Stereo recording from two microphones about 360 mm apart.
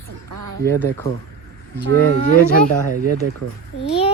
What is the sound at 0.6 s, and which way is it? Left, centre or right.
Speech, centre.